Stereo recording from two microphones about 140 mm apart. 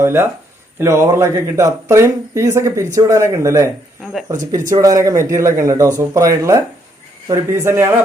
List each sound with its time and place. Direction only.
0.0 s speech: 15° right (ahead or behind)
4.0 s speech: centre (ahead or behind)
4.7 s speech: 25° right (ahead or behind)